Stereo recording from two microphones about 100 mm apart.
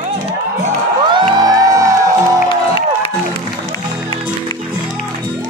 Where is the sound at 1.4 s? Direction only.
40° right (ahead or behind).